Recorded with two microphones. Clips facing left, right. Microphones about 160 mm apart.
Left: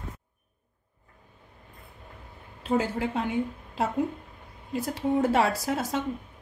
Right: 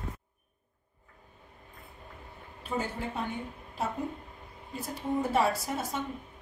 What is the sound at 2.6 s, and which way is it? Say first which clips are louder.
A woman's voice: left 7 dB; 90° left.